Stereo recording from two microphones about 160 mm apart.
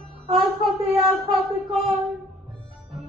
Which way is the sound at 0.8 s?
35° right (ahead or behind).